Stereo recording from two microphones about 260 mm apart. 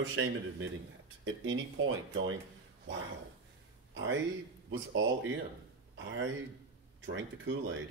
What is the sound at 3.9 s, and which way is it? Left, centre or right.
A man's voice, right.